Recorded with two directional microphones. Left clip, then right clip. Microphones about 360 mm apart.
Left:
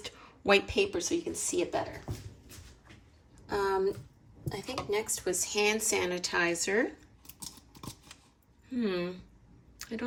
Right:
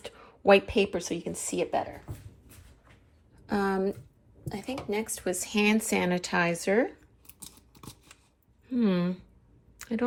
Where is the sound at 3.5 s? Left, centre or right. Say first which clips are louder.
Right 1 dB; right.